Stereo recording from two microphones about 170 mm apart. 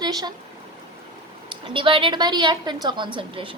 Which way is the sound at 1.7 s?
30° right (ahead or behind).